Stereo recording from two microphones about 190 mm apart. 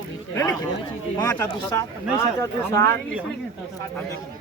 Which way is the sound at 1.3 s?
15° left (ahead or behind).